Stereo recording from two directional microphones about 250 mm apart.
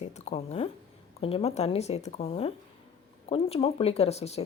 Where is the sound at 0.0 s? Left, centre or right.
Left.